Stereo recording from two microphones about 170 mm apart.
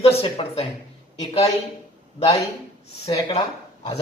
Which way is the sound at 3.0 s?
35° left (ahead or behind).